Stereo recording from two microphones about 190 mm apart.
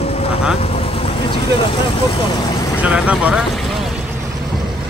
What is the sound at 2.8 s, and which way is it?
Speech, 5° right (ahead or behind).